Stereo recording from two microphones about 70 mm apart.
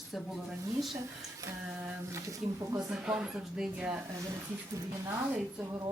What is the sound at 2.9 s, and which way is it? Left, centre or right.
Speech, centre.